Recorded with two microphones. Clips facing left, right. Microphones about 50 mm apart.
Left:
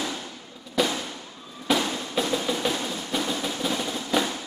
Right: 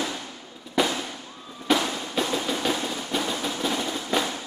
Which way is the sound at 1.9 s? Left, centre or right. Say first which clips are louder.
Even; centre.